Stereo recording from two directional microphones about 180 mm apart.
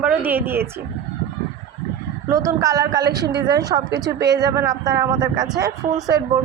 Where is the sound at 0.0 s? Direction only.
5° right (ahead or behind).